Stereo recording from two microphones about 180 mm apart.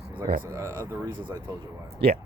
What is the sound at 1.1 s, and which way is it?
Speech, 25° right (ahead or behind).